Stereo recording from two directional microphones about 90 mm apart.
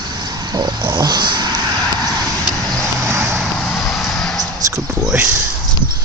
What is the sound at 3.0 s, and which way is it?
Vehicle, 30° right (ahead or behind).